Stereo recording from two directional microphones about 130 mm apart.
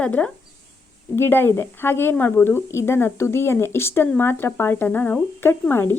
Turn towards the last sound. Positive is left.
turn(degrees=20)  # may be behind; listen again after turning